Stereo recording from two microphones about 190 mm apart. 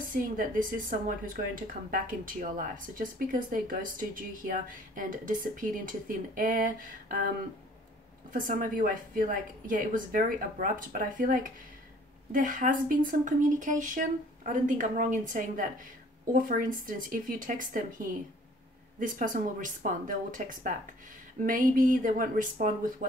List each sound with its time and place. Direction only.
0.1 s speech: 45° right (ahead or behind)
8.3 s speech: 45° right (ahead or behind)